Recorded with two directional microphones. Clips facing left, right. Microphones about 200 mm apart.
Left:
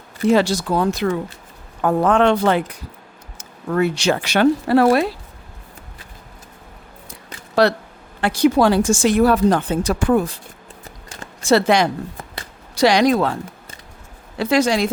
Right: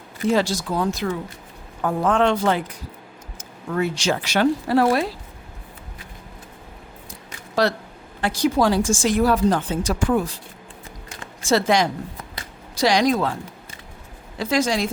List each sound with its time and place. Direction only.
0.3 s speech: 65° left (ahead or behind)
7.1 s a sound: 65° left (ahead or behind)
8.2 s speech: 65° left (ahead or behind)
11.4 s speech: 65° left (ahead or behind)